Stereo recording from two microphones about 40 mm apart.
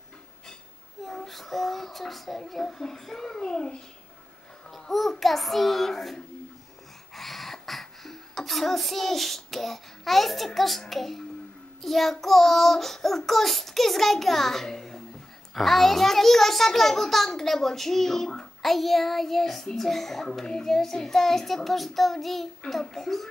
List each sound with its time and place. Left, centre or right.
1.0 s child singing: centre
3.3 s a child's voice: centre
4.6 s a sound: centre
5.2 s child singing: centre
7.2 s child singing: centre
15.5 s a child's voice: centre
21.6 s child singing: centre
22.7 s a child's voice: centre